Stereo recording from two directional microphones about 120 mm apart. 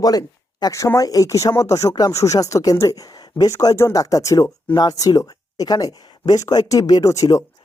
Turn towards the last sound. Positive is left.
turn(degrees=30)  # may be behind; listen again after turning